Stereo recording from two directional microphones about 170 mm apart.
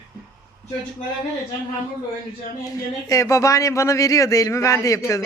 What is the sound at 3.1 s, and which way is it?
A man's voice, 20° left (ahead or behind).